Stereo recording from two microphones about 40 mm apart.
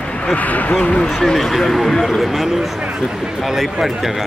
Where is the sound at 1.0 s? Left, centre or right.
Centre.